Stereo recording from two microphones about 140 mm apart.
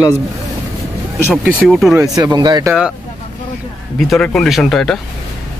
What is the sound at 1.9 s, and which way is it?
Speech, 25° right (ahead or behind).